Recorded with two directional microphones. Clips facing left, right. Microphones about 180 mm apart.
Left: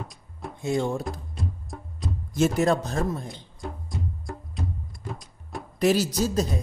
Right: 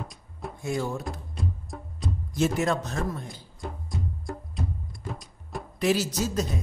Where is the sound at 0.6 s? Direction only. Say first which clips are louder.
Left 4 dB; 25° left (ahead or behind).